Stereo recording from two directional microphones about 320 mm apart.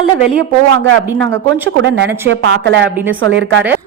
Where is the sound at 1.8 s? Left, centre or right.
Right.